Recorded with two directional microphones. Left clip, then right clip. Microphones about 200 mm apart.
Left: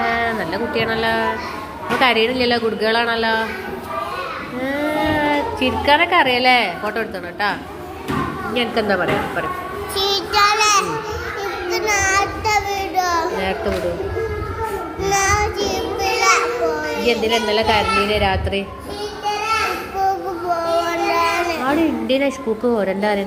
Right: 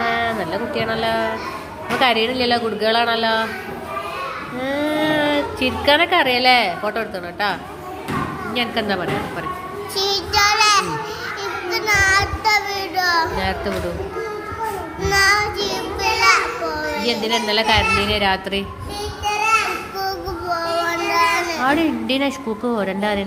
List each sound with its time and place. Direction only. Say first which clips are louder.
0.0 s a woman's voice: left 1 dB; 10° right (ahead or behind)
4.6 s a child's voice: even; 15° right (ahead or behind)
8.5 s a child's voice: left 3 dB; 20° right (ahead or behind)
9.9 s child singing: left 1 dB; 25° right (ahead or behind)
15.0 s child singing: right 2 dB; 15° right (ahead or behind)
17.1 s a child's voice: left 3 dB; 20° right (ahead or behind)
20.0 s child singing: left 5 dB; 15° right (ahead or behind)
21.6 s a woman's voice: even; 35° right (ahead or behind)